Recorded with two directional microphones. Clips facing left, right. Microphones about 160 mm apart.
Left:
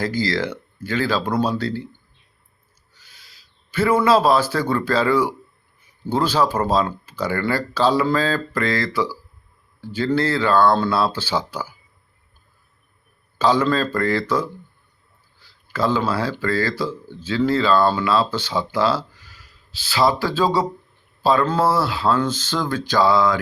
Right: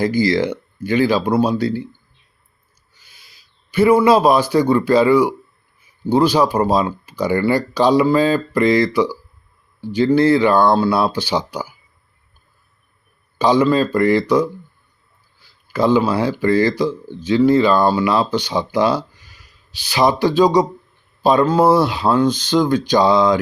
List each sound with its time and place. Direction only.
0.0 s speech: 15° right (ahead or behind)
3.1 s speech: 10° right (ahead or behind)
13.4 s speech: 15° right (ahead or behind)
15.6 s speech: 15° right (ahead or behind)